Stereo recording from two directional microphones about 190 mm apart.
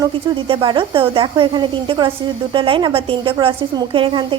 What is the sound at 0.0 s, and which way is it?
Speech, 25° right (ahead or behind).